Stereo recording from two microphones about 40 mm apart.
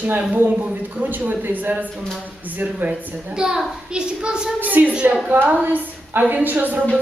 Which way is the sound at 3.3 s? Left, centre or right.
Centre.